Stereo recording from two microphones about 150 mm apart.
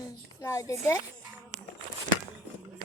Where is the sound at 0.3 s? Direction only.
20° left (ahead or behind).